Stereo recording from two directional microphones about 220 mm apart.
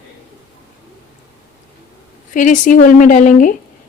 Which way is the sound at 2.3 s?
35° left (ahead or behind).